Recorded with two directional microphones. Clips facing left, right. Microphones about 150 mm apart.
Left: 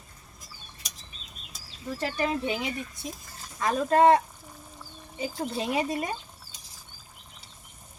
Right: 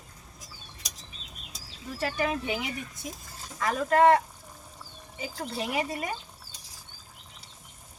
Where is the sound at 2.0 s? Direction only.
20° left (ahead or behind).